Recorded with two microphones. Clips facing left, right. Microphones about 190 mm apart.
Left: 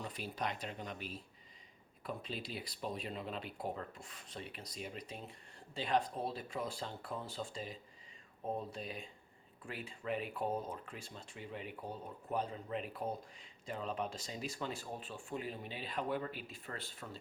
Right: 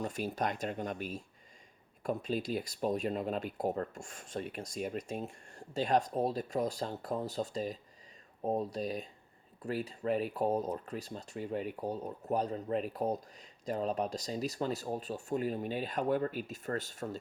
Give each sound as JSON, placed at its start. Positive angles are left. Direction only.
{"t": 0.0, "sound": "speech", "side_deg": -45}